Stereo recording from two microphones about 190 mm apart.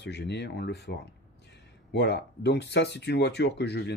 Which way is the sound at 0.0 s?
65° left (ahead or behind).